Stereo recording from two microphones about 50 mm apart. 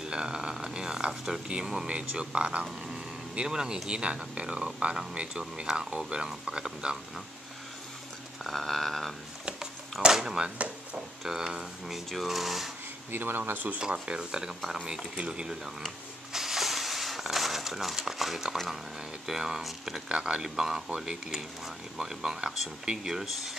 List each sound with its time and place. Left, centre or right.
0.0 s speech: centre
8.5 s a sound: centre
10.0 s speech: centre
13.1 s speech: right
13.7 s speech: centre
16.3 s a sound: centre
19.2 s speech: centre
20.1 s speech: centre